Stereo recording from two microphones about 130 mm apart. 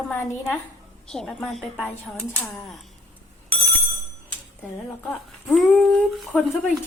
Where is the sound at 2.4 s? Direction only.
Centre (ahead or behind).